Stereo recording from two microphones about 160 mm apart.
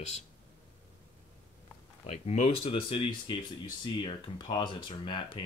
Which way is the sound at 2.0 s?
40° left (ahead or behind).